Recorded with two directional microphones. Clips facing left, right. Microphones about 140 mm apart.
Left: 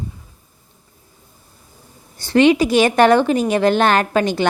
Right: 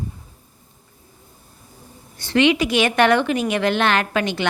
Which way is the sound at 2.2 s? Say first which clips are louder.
Left 4 dB; 40° left (ahead or behind).